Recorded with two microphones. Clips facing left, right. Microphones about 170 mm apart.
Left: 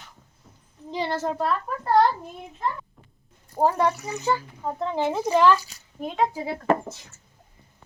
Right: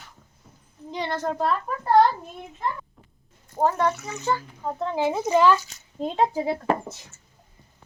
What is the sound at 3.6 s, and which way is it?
Speech, 10° left (ahead or behind).